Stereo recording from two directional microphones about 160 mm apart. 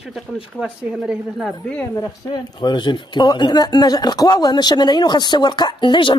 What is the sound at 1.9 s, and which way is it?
Speech, 25° left (ahead or behind).